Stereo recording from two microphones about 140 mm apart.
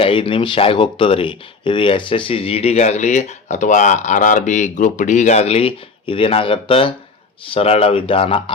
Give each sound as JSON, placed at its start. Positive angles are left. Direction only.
{"t": 0.0, "sound": "speech", "side_deg": 40}